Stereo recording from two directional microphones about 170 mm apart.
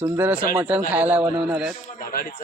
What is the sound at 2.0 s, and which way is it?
Speech, 55° left (ahead or behind).